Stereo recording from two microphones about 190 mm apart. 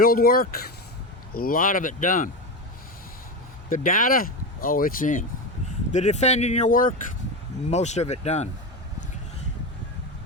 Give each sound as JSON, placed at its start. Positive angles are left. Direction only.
{"t": 0.0, "sound": "speech", "side_deg": 50}
{"t": 3.7, "sound": "speech", "side_deg": 45}